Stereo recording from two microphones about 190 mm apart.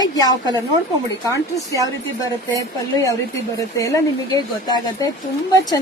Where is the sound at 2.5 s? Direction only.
15° left (ahead or behind).